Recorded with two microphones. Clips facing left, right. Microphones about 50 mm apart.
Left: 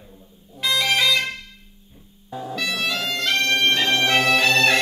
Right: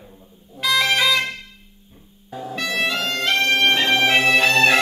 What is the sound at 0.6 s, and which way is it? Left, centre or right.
Music, centre.